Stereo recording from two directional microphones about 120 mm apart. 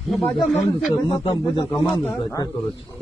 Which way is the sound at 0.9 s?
45° left (ahead or behind).